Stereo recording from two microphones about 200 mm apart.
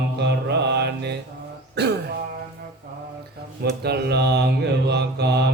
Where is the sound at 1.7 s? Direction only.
55° right (ahead or behind).